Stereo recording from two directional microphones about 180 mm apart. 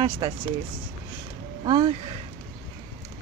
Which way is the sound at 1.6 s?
25° right (ahead or behind).